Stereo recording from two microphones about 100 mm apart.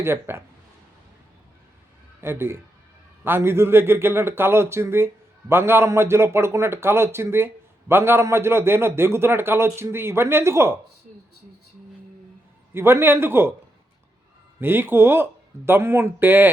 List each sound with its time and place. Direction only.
0.0 s speech: 25° right (ahead or behind)
2.2 s speech: 25° right (ahead or behind)
12.7 s speech: 25° right (ahead or behind)
14.6 s speech: 20° right (ahead or behind)